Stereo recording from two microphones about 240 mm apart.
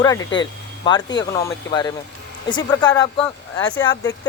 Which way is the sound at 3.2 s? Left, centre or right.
Centre.